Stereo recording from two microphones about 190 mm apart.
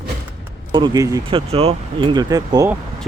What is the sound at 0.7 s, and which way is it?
Speech, 25° right (ahead or behind).